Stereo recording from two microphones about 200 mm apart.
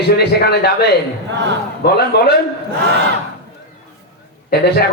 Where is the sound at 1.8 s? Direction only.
50° left (ahead or behind).